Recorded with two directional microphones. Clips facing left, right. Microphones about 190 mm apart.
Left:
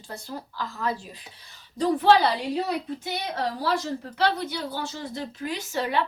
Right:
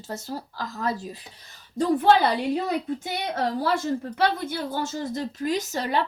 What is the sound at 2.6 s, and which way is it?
A woman's voice, 45° right (ahead or behind).